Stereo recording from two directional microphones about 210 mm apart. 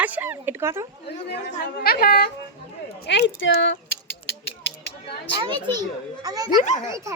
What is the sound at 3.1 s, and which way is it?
Speech, 60° left (ahead or behind).